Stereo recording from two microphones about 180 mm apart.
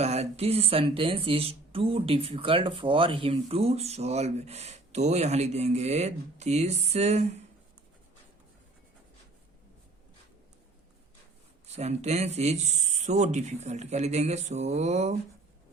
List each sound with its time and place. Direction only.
0.0 s speech: 35° right (ahead or behind)
11.7 s speech: 40° right (ahead or behind)